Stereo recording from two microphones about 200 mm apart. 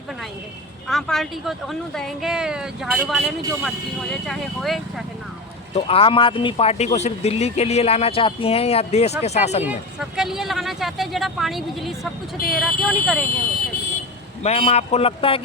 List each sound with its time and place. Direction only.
0.9 s speech: centre (ahead or behind)
5.7 s speech: 30° left (ahead or behind)
9.6 s speech: centre (ahead or behind)
14.4 s speech: 30° left (ahead or behind)